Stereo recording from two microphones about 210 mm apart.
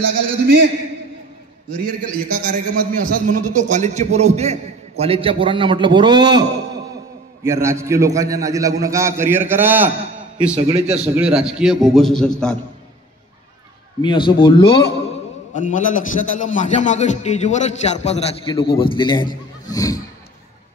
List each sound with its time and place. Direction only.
0.1 s a man's voice: 45° right (ahead or behind)
2.5 s a man's voice: 40° right (ahead or behind); by 6.4 s 20° right (ahead or behind)
7.4 s a man's voice: 15° right (ahead or behind)
10.7 s a man's voice: 30° right (ahead or behind)
11.1 s a man's voice: 5° right (ahead or behind)
14.0 s a man's voice: 25° left (ahead or behind)
15.5 s a man's voice: 35° left (ahead or behind); by 20.0 s 15° left (ahead or behind)